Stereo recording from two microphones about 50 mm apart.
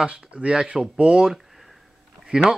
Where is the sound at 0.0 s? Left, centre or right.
Right.